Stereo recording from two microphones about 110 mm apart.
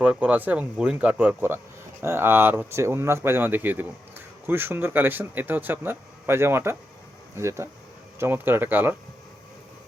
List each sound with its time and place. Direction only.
0.0 s speech: 10° right (ahead or behind)